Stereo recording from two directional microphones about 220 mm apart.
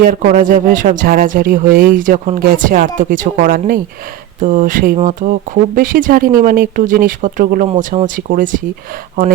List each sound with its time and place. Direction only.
0.0 s speech: 40° right (ahead or behind)